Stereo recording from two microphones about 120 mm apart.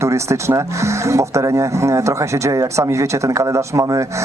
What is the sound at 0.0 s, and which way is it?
Speech, 25° right (ahead or behind).